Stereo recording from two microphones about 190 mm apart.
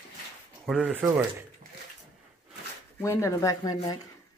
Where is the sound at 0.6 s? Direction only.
5° right (ahead or behind).